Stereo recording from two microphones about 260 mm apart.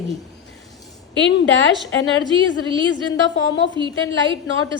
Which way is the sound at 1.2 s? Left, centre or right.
Left.